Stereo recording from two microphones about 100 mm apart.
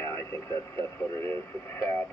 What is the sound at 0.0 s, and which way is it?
Radio, 25° left (ahead or behind).